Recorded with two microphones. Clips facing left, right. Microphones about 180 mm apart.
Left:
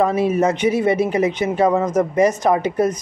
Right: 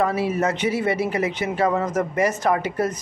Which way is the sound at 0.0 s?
20° left (ahead or behind).